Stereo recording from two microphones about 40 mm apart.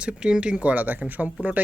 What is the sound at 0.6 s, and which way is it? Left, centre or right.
Speech, right.